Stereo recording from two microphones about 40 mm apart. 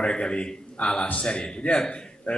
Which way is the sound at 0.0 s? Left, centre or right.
Left.